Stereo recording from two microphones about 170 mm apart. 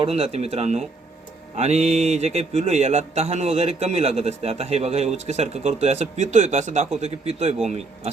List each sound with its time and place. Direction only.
0.0 s a man's voice: 35° right (ahead or behind)